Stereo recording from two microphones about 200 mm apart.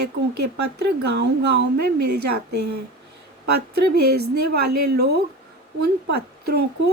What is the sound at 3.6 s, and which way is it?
A woman's voice, 55° right (ahead or behind).